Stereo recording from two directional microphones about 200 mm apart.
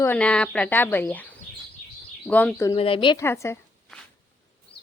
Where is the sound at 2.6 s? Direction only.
25° left (ahead or behind).